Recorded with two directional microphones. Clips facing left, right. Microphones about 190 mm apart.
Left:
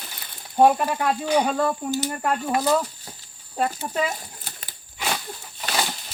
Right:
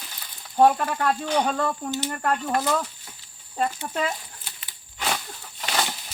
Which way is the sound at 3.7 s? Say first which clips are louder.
Left 2 dB; 40° left (ahead or behind).